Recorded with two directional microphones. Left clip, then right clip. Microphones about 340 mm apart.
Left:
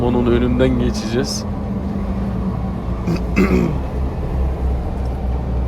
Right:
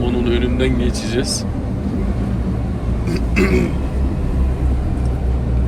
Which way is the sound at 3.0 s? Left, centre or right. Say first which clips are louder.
Even; centre.